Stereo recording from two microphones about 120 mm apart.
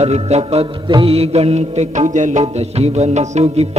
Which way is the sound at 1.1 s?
60° right (ahead or behind).